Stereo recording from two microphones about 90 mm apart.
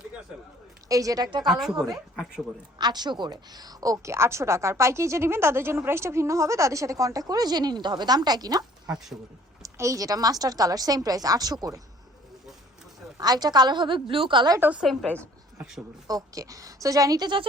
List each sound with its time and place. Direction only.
0.9 s a woman's voice: 40° right (ahead or behind)
1.5 s a woman's voice: centre (ahead or behind)
2.7 s a woman's voice: 50° right (ahead or behind)
9.6 s a woman's voice: 35° right (ahead or behind)
13.1 s a woman's voice: 45° right (ahead or behind); by 14.4 s 70° right (ahead or behind)
14.6 s a woman's voice: 25° right (ahead or behind)
15.0 s a woman's voice: 15° left (ahead or behind)
16.0 s a woman's voice: 40° right (ahead or behind)